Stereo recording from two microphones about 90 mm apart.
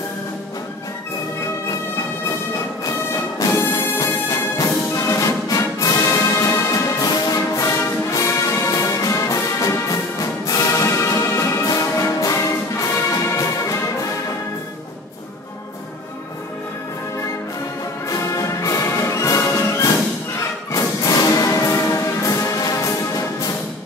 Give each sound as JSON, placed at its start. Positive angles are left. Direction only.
{"t": 2.0, "sound": "music", "side_deg": 40}
{"t": 18.0, "sound": "orchestra", "side_deg": 35}
{"t": 20.7, "sound": "music", "side_deg": 40}